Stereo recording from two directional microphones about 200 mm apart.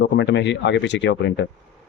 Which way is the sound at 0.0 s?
60° left (ahead or behind).